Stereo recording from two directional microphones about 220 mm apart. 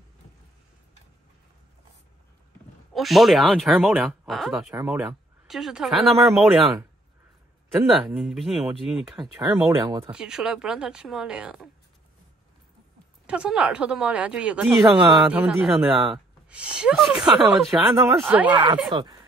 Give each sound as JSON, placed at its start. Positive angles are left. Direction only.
{"t": 2.9, "sound": "speech", "side_deg": 0}
{"t": 7.8, "sound": "speech", "side_deg": 0}
{"t": 9.4, "sound": "speech", "side_deg": -15}
{"t": 10.1, "sound": "speech", "side_deg": -5}
{"t": 13.3, "sound": "speech", "side_deg": -5}
{"t": 15.2, "sound": "speech", "side_deg": -5}
{"t": 18.5, "sound": "speech", "side_deg": -20}